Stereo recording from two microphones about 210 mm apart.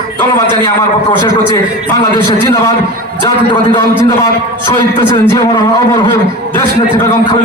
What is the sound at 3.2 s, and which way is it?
A man's voice, 20° left (ahead or behind).